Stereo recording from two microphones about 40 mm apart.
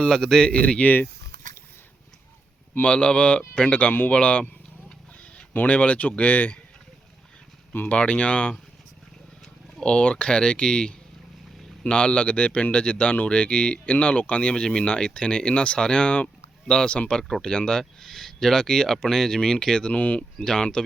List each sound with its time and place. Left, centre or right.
0.0 s speech: centre
0.4 s speech: left
2.8 s speech: left
5.6 s speech: left
7.9 s speech: left
9.8 s speech: left
19.9 s speech: left
20.4 s speech: centre